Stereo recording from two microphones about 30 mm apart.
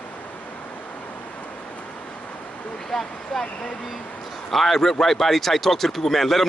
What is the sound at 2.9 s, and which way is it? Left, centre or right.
Speech, centre.